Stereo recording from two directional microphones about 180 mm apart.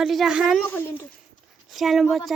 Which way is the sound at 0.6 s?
10° left (ahead or behind).